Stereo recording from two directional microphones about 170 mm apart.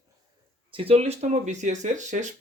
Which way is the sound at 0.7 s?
35° right (ahead or behind).